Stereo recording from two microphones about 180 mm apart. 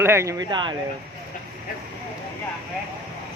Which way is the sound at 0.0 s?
15° right (ahead or behind).